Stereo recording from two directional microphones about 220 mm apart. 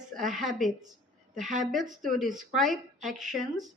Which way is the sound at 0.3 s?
Centre (ahead or behind).